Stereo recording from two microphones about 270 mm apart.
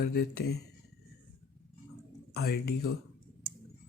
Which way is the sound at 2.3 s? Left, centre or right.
Left.